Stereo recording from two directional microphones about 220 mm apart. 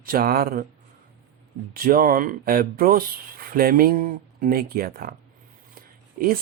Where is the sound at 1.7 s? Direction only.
40° right (ahead or behind).